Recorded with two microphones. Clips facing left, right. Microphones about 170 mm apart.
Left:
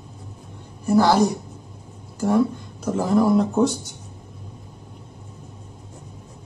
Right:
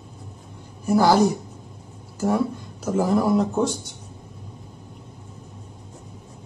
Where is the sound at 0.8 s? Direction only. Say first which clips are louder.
Even; 10° right (ahead or behind).